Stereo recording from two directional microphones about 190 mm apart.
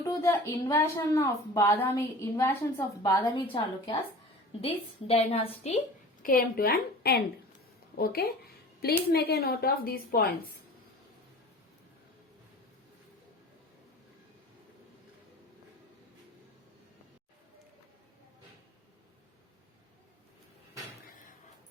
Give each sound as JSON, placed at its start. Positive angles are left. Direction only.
{"t": 0.0, "sound": "a woman's voice", "side_deg": 15}
{"t": 5.0, "sound": "a woman's voice", "side_deg": 30}
{"t": 6.2, "sound": "a woman's voice", "side_deg": 50}